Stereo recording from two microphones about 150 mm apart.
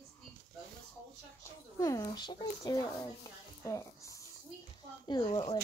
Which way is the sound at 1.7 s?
20° left (ahead or behind).